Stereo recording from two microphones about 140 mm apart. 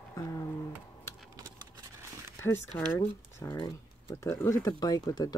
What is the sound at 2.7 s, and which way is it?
Speech, 10° left (ahead or behind).